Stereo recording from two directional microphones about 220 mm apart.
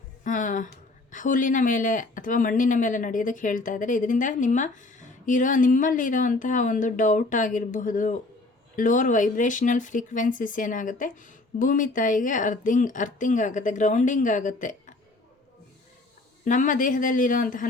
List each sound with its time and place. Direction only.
0.3 s speech: 35° left (ahead or behind)
16.4 s speech: 35° left (ahead or behind)